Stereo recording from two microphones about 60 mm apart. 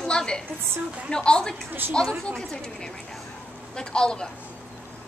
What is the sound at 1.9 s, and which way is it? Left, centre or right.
A woman's voice, centre.